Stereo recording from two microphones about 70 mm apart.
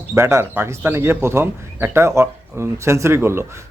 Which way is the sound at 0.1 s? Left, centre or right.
Right.